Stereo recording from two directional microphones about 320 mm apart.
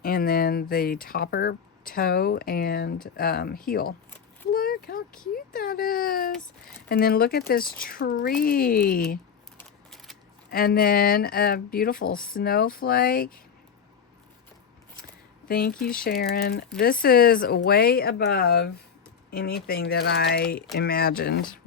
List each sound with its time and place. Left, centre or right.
0.0 s speech: left
4.5 s a sound: left
5.5 s speech: left
9.6 s a sound: centre
10.5 s speech: left
15.4 s speech: left